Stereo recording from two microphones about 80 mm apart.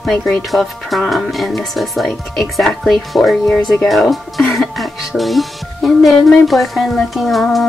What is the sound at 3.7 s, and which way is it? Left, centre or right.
Music, centre.